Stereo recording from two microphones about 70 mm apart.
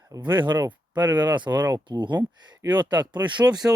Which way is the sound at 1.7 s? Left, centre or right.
Right.